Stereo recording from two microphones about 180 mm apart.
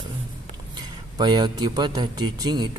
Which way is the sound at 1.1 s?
25° right (ahead or behind).